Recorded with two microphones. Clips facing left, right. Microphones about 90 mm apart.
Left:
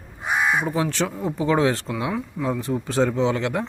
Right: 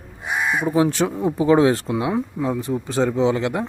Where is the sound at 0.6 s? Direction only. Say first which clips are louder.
Right 5 dB; 10° right (ahead or behind).